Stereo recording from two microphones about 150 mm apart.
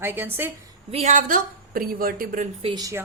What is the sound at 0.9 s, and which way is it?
A woman's voice, 45° right (ahead or behind).